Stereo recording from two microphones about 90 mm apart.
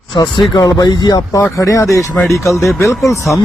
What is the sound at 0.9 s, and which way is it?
Speech, 55° left (ahead or behind).